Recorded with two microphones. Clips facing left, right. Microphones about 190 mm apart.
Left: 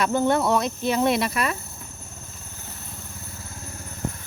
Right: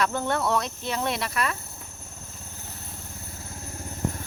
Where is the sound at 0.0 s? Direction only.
10° left (ahead or behind).